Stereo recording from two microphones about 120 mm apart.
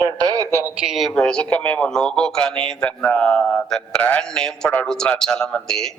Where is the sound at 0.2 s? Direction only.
30° right (ahead or behind).